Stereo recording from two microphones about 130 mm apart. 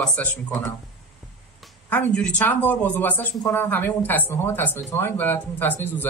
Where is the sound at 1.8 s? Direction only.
15° left (ahead or behind).